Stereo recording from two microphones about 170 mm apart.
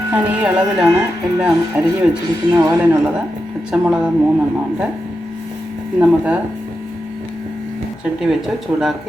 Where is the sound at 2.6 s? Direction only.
20° right (ahead or behind).